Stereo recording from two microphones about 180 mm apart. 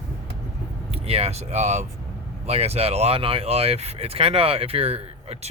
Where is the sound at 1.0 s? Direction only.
35° right (ahead or behind).